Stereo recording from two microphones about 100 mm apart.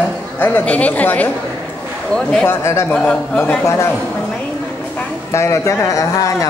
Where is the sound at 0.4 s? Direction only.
15° left (ahead or behind).